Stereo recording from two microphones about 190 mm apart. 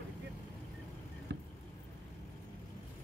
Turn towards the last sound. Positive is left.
turn(degrees=-65)  # may be behind; listen again after turning